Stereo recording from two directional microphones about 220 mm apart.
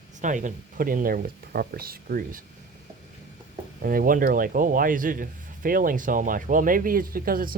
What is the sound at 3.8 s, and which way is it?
A man's voice, 40° right (ahead or behind).